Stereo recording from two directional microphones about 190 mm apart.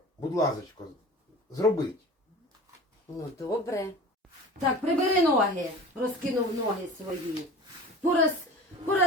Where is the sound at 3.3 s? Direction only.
15° left (ahead or behind).